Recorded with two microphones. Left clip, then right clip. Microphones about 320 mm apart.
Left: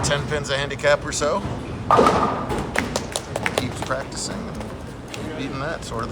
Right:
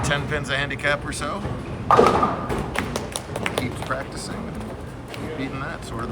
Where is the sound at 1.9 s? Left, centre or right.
Centre.